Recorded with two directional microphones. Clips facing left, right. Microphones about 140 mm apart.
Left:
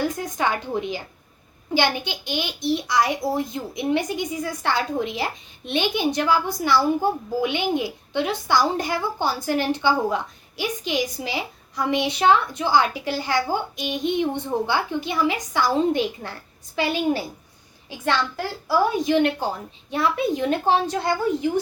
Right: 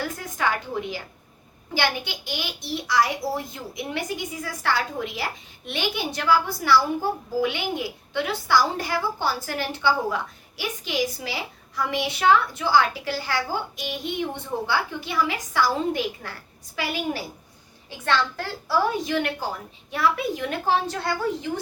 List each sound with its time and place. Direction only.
0.0 s a woman's voice: 20° left (ahead or behind)
17.8 s a woman's voice: 15° left (ahead or behind)